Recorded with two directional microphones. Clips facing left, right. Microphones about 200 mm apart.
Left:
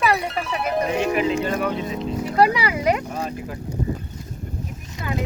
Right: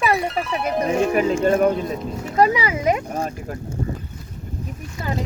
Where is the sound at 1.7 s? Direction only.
Centre (ahead or behind).